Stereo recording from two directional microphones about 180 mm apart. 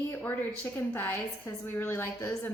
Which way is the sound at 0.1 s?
10° left (ahead or behind).